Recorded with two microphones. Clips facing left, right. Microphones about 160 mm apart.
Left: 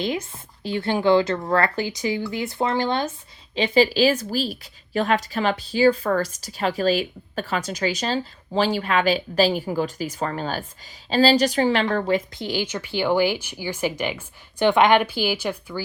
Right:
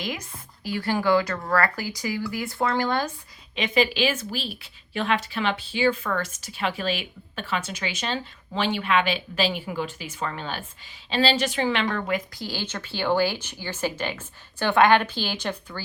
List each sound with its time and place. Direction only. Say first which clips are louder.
0.6 s speech: left 3 dB; 25° left (ahead or behind)
3.5 s a woman's voice: left 5 dB; 35° left (ahead or behind); by 15.8 s 10° left (ahead or behind)